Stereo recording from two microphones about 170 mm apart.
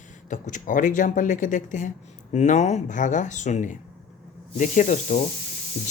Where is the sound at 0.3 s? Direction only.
45° left (ahead or behind).